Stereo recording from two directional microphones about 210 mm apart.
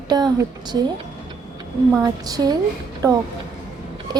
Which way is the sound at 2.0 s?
15° right (ahead or behind).